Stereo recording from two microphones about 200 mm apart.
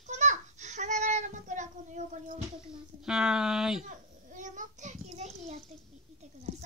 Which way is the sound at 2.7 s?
5° right (ahead or behind).